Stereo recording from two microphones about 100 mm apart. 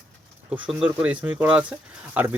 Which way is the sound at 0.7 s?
10° right (ahead or behind).